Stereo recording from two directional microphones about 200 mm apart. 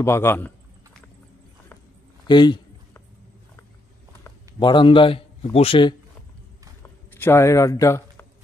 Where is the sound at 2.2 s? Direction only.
20° left (ahead or behind).